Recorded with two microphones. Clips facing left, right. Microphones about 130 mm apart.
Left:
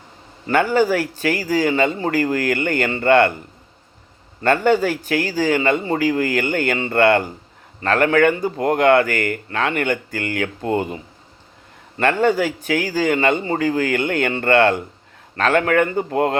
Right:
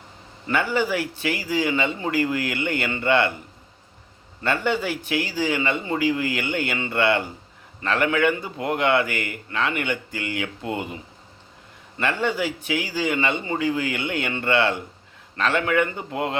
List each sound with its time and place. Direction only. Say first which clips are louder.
0.4 s speech: left 6 dB; 45° left (ahead or behind)
4.4 s speech: left 7 dB; 45° left (ahead or behind)